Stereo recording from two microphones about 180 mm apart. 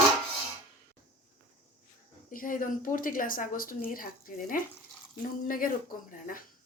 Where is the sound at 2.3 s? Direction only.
50° left (ahead or behind).